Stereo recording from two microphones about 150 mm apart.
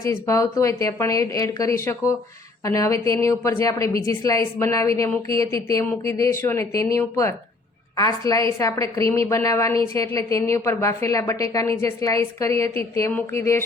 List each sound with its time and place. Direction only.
0.0 s a woman's voice: 20° left (ahead or behind)